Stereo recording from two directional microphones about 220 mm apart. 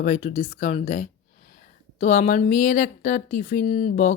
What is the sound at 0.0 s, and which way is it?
Speech, 35° left (ahead or behind).